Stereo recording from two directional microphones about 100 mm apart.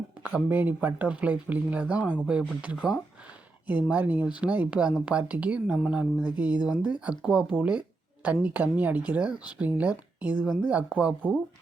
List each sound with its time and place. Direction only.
0.2 s a woman's voice: 15° right (ahead or behind)